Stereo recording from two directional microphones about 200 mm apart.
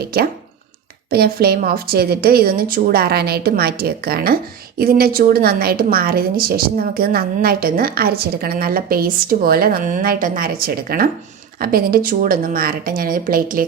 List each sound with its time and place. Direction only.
0.0 s a woman's voice: 50° right (ahead or behind)